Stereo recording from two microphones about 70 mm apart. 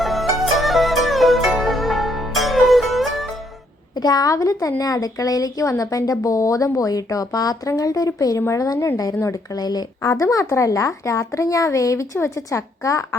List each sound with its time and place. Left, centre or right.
0.0 s music: centre
3.9 s speech: left
9.6 s speech: left
10.1 s speech: left